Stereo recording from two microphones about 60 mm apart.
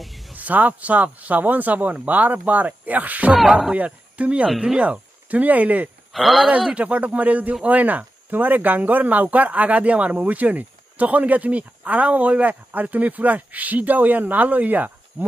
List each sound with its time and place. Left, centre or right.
0.0 s a sound: centre
0.3 s speech: right
6.1 s speech: centre
6.7 s speech: right